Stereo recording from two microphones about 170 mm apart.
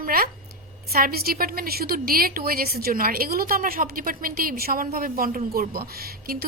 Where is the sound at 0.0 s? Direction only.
60° right (ahead or behind).